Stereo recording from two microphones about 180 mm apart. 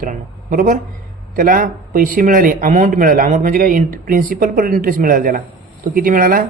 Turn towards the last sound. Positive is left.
turn(degrees=-50)  # may be behind; listen again after turning